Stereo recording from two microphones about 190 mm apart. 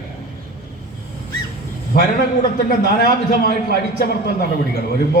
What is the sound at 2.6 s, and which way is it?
A man's voice, 50° left (ahead or behind).